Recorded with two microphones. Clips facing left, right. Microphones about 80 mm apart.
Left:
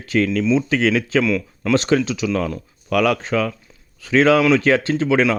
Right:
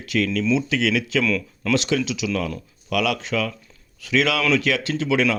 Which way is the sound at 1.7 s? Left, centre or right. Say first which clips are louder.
Left 4 dB; left.